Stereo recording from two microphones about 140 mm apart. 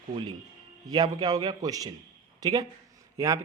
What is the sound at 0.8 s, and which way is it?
Speech, 30° right (ahead or behind).